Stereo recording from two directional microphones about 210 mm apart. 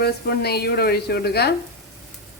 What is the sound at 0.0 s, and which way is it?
Speech, 50° left (ahead or behind).